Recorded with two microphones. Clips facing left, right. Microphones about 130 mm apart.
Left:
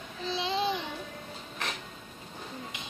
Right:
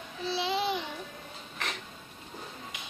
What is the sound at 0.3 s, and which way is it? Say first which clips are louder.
Babbling: even; 10° right (ahead or behind).